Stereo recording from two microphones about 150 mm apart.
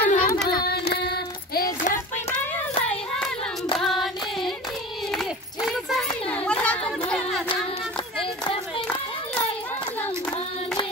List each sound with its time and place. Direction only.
0.0 s carnatic music: 65° left (ahead or behind)
0.7 s child singing: 90° left
3.7 s hands: centre (ahead or behind)
5.1 s a sound: centre (ahead or behind)
6.2 s children playing: 10° left (ahead or behind)
7.1 s music: centre (ahead or behind)
8.2 s a sound: 35° left (ahead or behind)